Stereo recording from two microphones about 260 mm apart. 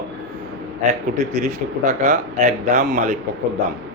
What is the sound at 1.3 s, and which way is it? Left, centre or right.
Speech, right.